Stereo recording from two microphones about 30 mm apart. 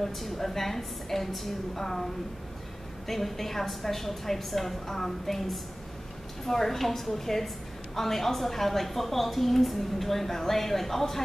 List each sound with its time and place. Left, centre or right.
0.0 s a woman's voice: centre
3.1 s a woman's voice: centre